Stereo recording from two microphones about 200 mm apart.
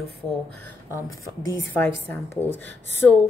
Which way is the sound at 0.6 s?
15° left (ahead or behind).